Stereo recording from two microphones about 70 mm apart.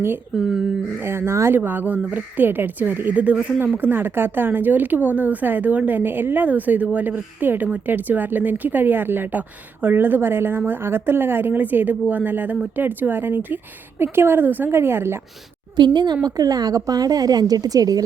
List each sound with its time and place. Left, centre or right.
0.3 s speech: centre
1.0 s a woman's voice: right
1.5 s a woman's voice: right
15.7 s a woman's voice: right
16.2 s a woman's voice: right